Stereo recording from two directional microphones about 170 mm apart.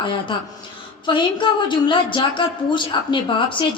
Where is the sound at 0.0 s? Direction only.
30° left (ahead or behind).